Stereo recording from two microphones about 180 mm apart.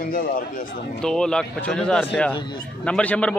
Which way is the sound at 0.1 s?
55° left (ahead or behind).